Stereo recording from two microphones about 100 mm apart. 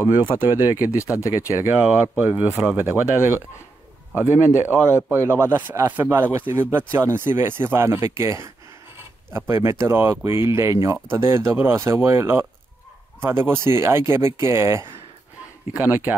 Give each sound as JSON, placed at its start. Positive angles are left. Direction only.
{"t": 0.0, "sound": "a man's voice", "side_deg": -20}